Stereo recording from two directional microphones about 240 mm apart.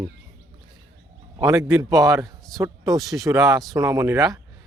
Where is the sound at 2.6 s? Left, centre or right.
Centre.